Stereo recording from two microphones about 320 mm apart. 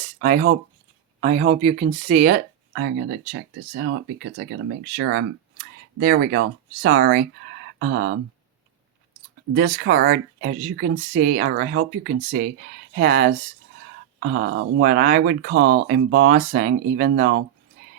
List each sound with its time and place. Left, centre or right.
0.2 s speech: right
9.6 s speech: right